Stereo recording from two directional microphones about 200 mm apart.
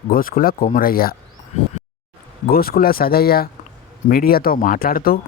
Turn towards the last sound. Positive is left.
turn(degrees=45)  # may be behind; listen again after turning